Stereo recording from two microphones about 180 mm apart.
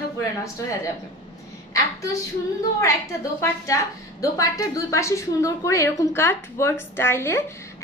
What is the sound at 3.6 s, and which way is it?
A woman's voice, 15° left (ahead or behind).